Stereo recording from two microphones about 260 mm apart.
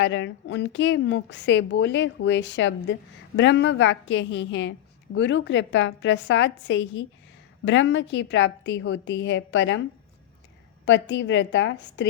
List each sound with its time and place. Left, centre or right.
0.0 s a woman's voice: left
10.8 s a woman's voice: left